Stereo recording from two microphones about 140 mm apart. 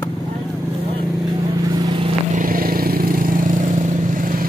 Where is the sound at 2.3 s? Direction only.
80° right.